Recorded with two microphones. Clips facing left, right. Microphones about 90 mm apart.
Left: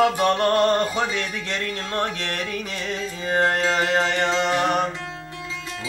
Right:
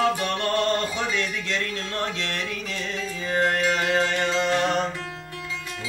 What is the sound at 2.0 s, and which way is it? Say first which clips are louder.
Music: left 2 dB; 55° left (ahead or behind).